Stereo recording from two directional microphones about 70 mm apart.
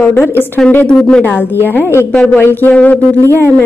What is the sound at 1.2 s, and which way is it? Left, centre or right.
A woman's voice, left.